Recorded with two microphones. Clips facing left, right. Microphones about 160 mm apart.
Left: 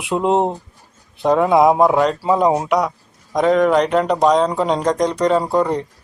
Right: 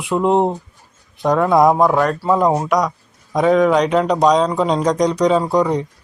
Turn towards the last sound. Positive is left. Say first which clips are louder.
# right 1 dB
turn(degrees=5)  # may be behind; listen again after turning